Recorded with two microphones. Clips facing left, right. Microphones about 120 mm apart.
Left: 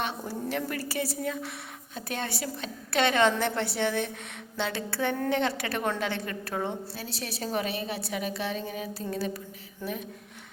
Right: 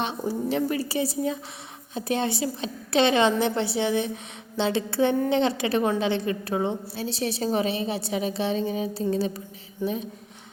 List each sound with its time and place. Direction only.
0.0 s a woman's voice: 20° right (ahead or behind)